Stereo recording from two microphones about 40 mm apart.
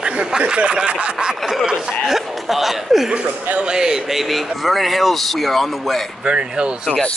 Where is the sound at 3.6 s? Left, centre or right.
Centre.